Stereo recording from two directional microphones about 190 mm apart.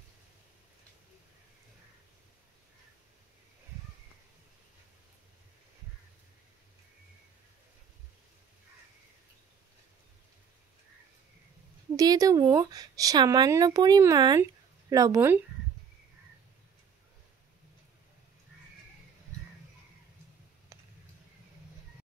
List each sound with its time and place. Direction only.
12.0 s speech: 20° right (ahead or behind)